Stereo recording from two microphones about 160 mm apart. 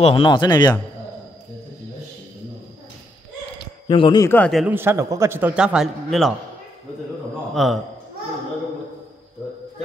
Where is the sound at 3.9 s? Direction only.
30° left (ahead or behind).